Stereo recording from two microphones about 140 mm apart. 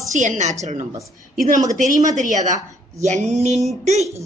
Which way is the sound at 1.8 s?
60° right (ahead or behind).